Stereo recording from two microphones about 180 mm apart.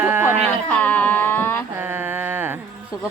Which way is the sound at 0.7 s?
10° left (ahead or behind).